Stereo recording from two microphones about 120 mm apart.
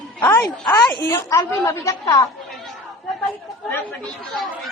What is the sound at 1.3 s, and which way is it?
Speech, 25° left (ahead or behind).